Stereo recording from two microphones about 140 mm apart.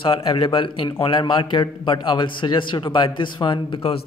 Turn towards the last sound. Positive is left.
turn(degrees=40)  # may be behind; listen again after turning